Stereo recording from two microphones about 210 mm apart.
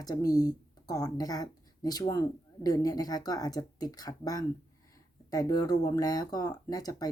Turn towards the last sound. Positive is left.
turn(degrees=20)  # may be behind; listen again after turning